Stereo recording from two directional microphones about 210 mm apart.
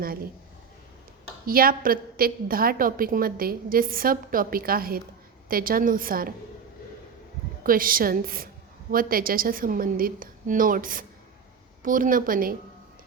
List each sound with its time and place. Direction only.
1.5 s a woman's voice: 45° right (ahead or behind)
7.6 s a woman's voice: 40° right (ahead or behind)